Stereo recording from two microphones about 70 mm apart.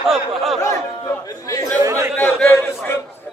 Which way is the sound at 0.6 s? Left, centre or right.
Left.